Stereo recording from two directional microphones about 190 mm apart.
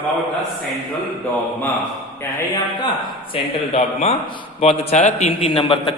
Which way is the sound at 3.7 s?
35° left (ahead or behind).